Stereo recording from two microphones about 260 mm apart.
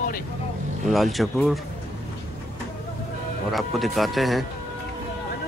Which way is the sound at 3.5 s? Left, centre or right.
Centre.